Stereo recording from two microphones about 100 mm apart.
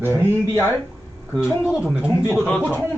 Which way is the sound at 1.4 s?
5° right (ahead or behind).